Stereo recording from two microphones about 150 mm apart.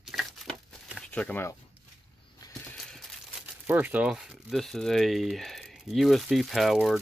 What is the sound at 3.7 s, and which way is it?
Speech, 10° right (ahead or behind).